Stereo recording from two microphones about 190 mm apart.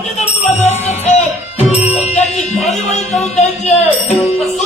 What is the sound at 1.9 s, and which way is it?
Music, 35° left (ahead or behind).